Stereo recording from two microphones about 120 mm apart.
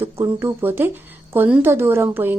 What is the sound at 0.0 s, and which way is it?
A woman's voice, 20° right (ahead or behind).